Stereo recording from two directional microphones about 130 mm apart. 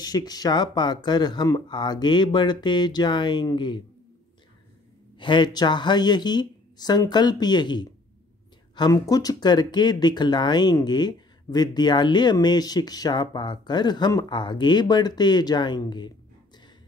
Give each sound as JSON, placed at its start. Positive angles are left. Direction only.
{"t": 0.0, "sound": "speech", "side_deg": 30}
{"t": 5.2, "sound": "speech", "side_deg": 35}